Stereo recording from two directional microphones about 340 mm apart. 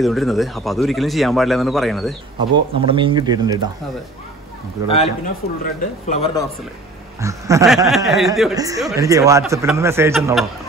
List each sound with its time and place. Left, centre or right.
0.0 s a man's voice: centre
2.5 s speech: centre
4.8 s a man's voice: centre
7.2 s speech: centre